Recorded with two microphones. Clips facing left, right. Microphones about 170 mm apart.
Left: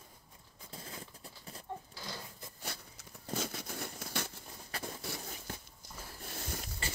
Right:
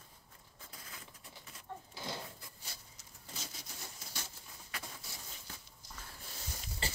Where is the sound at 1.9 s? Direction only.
20° right (ahead or behind).